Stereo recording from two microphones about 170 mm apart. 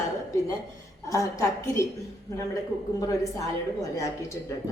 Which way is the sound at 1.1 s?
20° left (ahead or behind).